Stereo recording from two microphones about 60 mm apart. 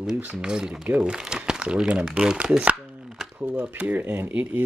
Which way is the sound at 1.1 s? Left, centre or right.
Centre.